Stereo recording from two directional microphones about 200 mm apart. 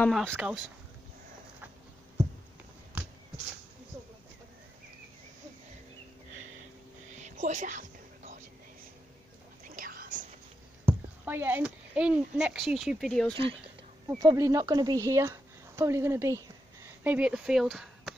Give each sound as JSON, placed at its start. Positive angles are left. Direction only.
{"t": 0.0, "sound": "speech", "side_deg": 5}
{"t": 3.0, "sound": "a sound", "side_deg": -5}
{"t": 7.1, "sound": "whispering", "side_deg": -35}
{"t": 9.7, "sound": "whispering", "side_deg": -45}
{"t": 10.9, "sound": "speech", "side_deg": -10}
{"t": 14.0, "sound": "speech", "side_deg": -15}